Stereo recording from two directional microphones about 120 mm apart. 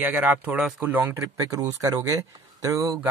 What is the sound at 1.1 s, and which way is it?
Speech, 25° right (ahead or behind).